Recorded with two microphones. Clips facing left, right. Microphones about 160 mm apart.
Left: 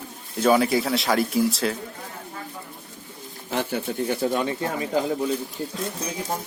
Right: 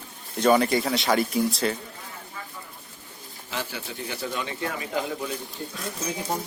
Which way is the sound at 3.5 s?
50° left (ahead or behind).